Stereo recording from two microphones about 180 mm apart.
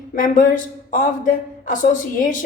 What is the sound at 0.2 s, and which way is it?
A woman's voice, 45° left (ahead or behind).